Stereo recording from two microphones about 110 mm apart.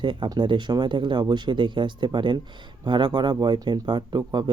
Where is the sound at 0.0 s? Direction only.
45° right (ahead or behind).